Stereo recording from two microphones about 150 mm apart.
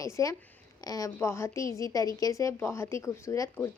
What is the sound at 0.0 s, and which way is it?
A woman's voice, 20° left (ahead or behind).